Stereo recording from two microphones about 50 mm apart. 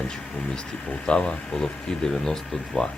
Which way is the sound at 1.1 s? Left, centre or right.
Left.